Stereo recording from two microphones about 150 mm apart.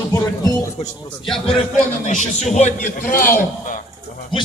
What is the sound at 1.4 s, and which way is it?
A man's voice, 55° left (ahead or behind).